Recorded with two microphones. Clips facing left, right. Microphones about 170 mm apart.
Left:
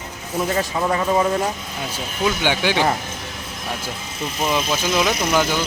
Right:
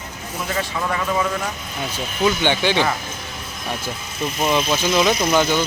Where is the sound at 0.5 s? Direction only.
30° left (ahead or behind).